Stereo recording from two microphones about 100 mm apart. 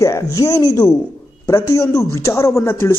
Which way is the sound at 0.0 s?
35° left (ahead or behind).